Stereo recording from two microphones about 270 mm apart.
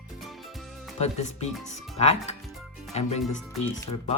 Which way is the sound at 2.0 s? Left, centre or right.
Left.